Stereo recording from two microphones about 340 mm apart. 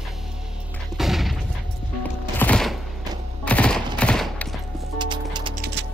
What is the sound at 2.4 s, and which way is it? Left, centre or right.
Music, centre.